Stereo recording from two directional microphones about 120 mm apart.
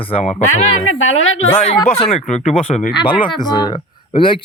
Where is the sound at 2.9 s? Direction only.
45° left (ahead or behind).